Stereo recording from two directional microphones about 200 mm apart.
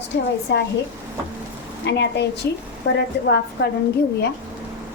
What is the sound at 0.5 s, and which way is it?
Speech, 60° left (ahead or behind).